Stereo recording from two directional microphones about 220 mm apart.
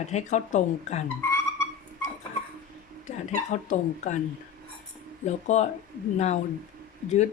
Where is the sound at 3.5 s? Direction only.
35° left (ahead or behind).